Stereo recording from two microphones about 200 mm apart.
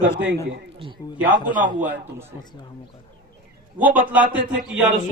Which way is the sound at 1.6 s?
10° right (ahead or behind).